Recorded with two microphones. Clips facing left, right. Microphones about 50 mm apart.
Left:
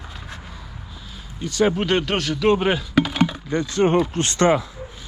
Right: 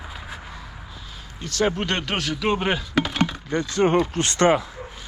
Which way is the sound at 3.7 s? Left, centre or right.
Right.